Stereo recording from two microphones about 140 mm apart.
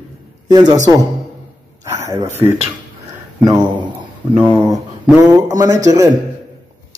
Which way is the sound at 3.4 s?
30° right (ahead or behind).